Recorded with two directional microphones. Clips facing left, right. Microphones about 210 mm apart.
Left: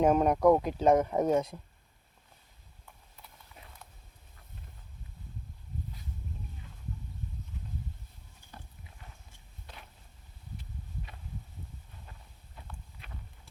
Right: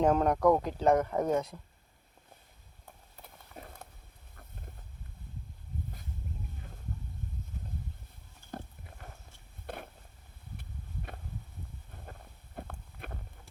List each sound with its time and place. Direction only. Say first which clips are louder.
0.0 s speech: left 2 dB; 15° left (ahead or behind)
2.8 s clip-clop: right 3 dB; 50° right (ahead or behind)
8.4 s pig: right 10 dB; 50° right (ahead or behind)
9.6 s a sound: right 11 dB; 55° right (ahead or behind)
12.5 s walk: right 7 dB; 55° right (ahead or behind)